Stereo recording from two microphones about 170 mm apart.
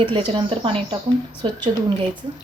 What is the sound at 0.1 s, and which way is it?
Speech, 30° right (ahead or behind).